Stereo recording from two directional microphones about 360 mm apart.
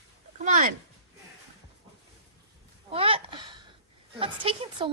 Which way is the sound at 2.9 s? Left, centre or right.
Centre.